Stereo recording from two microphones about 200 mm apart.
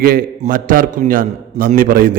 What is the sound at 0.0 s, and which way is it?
A man's voice, 45° right (ahead or behind).